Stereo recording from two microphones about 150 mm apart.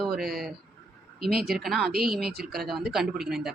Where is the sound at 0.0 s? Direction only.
Centre (ahead or behind).